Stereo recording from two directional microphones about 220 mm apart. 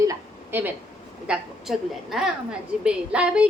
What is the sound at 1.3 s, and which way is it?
A woman's voice, centre (ahead or behind).